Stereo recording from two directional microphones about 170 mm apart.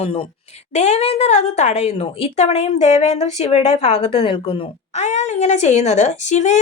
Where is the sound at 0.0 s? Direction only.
30° left (ahead or behind).